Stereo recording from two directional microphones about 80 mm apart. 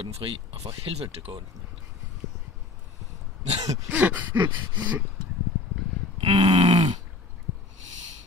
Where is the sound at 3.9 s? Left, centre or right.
Centre.